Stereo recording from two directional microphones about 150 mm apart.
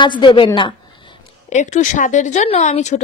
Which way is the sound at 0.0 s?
30° left (ahead or behind).